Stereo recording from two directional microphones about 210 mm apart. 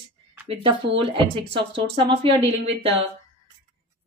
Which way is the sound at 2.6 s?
30° right (ahead or behind).